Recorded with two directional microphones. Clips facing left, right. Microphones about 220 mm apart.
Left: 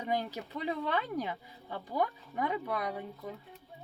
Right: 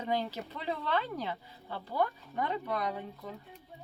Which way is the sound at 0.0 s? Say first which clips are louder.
Right 1 dB; 15° left (ahead or behind).